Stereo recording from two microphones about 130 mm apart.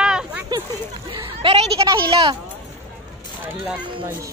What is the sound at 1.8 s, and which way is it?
Speech, 40° right (ahead or behind).